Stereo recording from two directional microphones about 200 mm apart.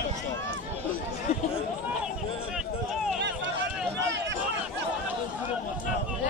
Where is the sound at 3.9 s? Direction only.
65° right (ahead or behind).